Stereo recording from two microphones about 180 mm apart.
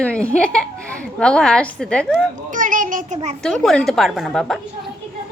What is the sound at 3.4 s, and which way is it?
A woman's voice, 5° left (ahead or behind).